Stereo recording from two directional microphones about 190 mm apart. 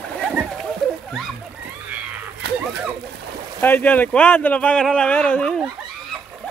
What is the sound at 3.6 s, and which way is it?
Speech, 10° left (ahead or behind).